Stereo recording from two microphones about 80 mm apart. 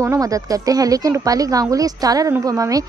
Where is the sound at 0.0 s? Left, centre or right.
Right.